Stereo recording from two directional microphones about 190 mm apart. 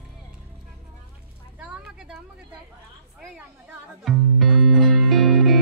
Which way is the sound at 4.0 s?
Centre (ahead or behind).